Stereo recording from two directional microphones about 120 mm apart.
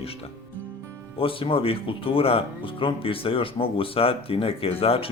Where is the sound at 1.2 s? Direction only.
50° left (ahead or behind).